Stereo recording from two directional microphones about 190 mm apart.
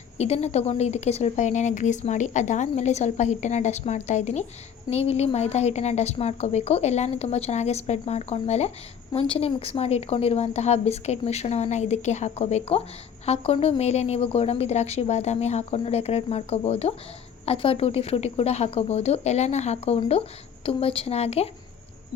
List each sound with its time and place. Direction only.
0.2 s speech: 35° left (ahead or behind)